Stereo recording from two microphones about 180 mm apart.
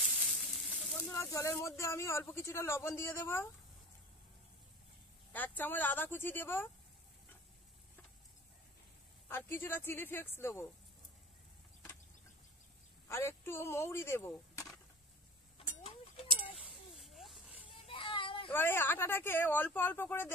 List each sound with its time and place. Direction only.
0.0 s sizzle: centre (ahead or behind)
1.1 s speech: 15° left (ahead or behind)
5.3 s speech: 10° left (ahead or behind)
9.3 s speech: 10° left (ahead or behind)
13.1 s speech: 15° left (ahead or behind)
15.5 s a sound: 30° left (ahead or behind)
16.5 s a sound: 5° right (ahead or behind)
17.8 s a sound: 30° left (ahead or behind)
18.5 s speech: 10° left (ahead or behind)